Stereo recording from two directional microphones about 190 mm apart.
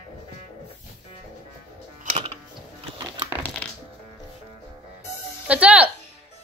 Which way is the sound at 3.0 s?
15° right (ahead or behind).